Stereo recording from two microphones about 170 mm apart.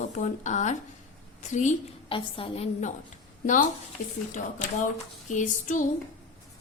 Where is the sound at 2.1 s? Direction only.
35° left (ahead or behind).